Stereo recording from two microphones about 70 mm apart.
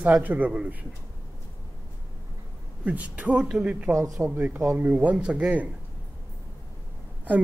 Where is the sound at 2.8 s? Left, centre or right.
Centre.